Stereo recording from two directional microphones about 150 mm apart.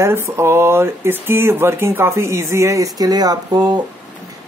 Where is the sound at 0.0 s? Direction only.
15° right (ahead or behind).